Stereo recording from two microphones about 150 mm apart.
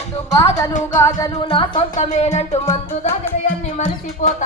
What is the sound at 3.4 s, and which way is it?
Music, 65° left (ahead or behind).